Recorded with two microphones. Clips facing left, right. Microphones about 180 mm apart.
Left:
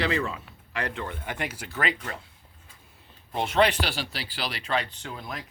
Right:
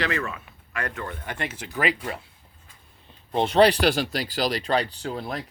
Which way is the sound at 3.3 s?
35° right (ahead or behind).